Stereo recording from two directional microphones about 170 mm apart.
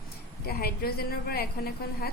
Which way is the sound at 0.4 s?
65° left (ahead or behind).